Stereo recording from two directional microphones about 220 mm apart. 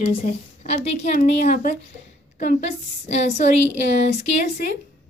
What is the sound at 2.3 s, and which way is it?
A woman's voice, 30° left (ahead or behind).